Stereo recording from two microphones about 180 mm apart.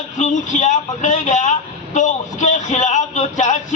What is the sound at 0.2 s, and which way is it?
A man's voice, 40° left (ahead or behind).